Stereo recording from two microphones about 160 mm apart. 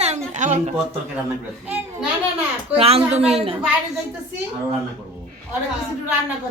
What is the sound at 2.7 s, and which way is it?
Speech, 40° right (ahead or behind).